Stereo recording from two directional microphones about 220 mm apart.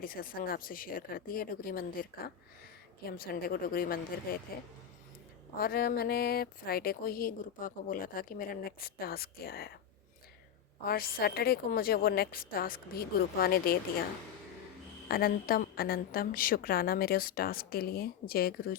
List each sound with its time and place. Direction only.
0.0 s speech: 40° left (ahead or behind)
5.5 s speech: 45° left (ahead or behind)
10.8 s speech: 45° left (ahead or behind)
15.0 s speech: 40° left (ahead or behind)